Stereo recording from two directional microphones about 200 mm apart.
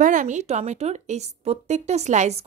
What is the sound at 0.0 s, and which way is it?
A woman's voice, 40° right (ahead or behind).